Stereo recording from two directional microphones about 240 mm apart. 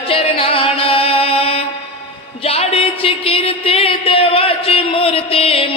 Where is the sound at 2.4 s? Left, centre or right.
Left.